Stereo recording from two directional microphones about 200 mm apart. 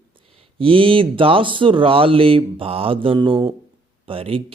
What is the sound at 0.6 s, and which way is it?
Speech, 25° right (ahead or behind).